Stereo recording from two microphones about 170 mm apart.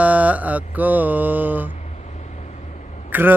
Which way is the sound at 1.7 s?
40° left (ahead or behind).